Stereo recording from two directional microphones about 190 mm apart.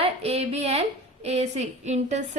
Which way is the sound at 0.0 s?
30° right (ahead or behind).